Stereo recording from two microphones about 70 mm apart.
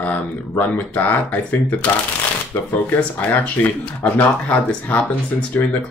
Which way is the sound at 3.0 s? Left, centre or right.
Left.